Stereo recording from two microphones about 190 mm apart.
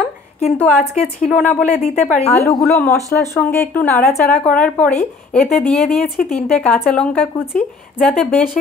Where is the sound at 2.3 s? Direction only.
15° left (ahead or behind).